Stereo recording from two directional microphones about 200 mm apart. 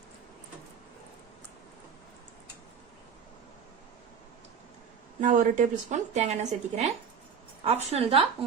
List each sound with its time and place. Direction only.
5.2 s a woman's voice: 40° right (ahead or behind)